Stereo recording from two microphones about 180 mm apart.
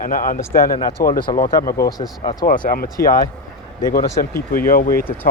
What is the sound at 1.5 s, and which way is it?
Speech, 20° left (ahead or behind).